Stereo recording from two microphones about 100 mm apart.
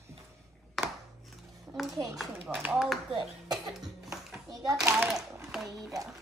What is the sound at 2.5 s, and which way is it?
Speech, 15° right (ahead or behind).